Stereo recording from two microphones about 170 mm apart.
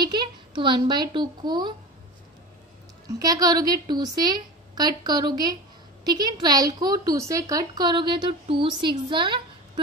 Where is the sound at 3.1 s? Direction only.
20° right (ahead or behind).